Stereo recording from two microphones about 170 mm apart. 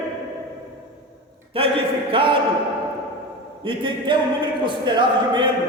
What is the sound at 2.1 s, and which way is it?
Speech, 30° right (ahead or behind).